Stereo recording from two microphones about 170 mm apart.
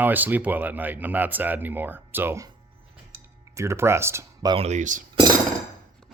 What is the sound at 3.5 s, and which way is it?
Speech, 15° right (ahead or behind).